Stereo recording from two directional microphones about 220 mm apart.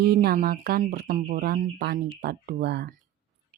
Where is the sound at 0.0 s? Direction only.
45° right (ahead or behind).